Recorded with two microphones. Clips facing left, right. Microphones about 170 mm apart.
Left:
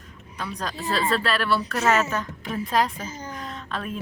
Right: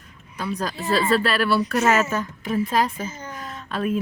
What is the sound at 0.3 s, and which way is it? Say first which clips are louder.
Speech: right 4 dB; 5° right (ahead or behind).